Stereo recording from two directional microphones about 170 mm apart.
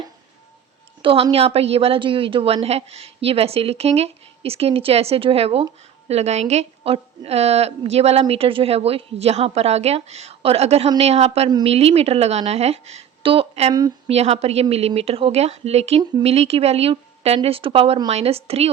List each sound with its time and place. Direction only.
1.0 s a woman's voice: 30° right (ahead or behind)